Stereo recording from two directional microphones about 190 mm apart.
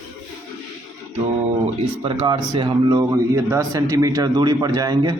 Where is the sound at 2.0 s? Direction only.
25° right (ahead or behind).